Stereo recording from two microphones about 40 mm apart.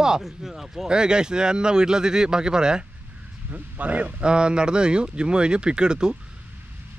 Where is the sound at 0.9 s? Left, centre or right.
Centre.